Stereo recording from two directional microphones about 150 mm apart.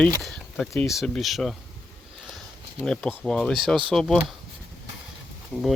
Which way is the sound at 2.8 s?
5° left (ahead or behind).